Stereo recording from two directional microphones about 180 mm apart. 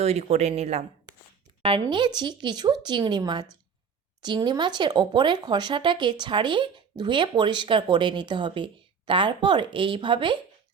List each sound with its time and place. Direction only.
0.0 s speech: 35° right (ahead or behind)